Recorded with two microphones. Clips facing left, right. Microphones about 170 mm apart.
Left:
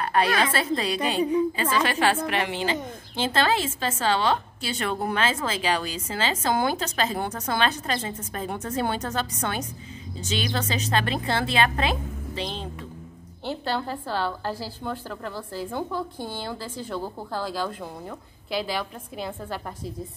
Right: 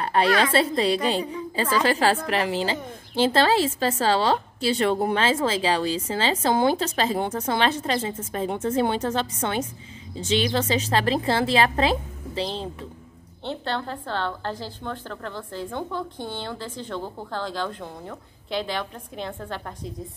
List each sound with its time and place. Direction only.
0.0 s a sound: 30° right (ahead or behind)
0.4 s a woman's voice: 30° right (ahead or behind)
13.4 s a woman's voice: 5° left (ahead or behind)